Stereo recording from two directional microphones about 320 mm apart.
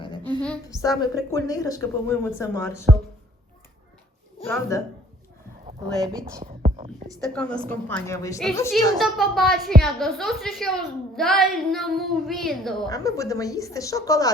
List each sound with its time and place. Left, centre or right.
0.0 s a sound: centre
0.4 s a woman's voice: centre
4.4 s a woman's voice: centre
5.6 s speech: centre
6.4 s whispering: right
7.3 s a woman's voice: centre